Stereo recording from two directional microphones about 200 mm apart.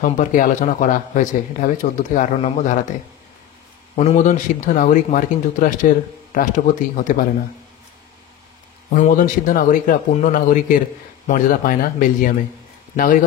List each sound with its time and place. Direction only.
0.0 s a man's voice: 40° left (ahead or behind)
3.9 s a man's voice: 35° left (ahead or behind)
8.9 s a man's voice: 40° left (ahead or behind)